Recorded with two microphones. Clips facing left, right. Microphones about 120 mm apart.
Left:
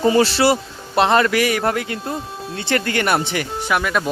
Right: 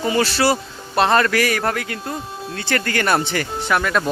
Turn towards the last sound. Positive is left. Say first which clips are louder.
# right 1 dB
turn(degrees=5)  # may be behind; listen again after turning